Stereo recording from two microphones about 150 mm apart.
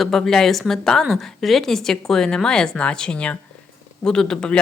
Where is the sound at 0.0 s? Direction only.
Centre (ahead or behind).